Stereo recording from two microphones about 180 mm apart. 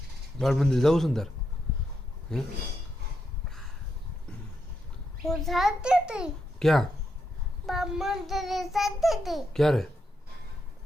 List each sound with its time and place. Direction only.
0.3 s child singing: centre (ahead or behind)
2.3 s child singing: 5° left (ahead or behind)
5.2 s child singing: centre (ahead or behind)